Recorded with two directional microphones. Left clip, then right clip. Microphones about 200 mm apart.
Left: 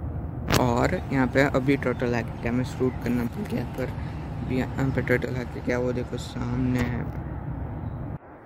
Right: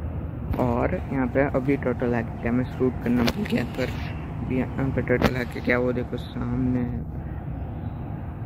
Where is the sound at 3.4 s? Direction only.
5° right (ahead or behind).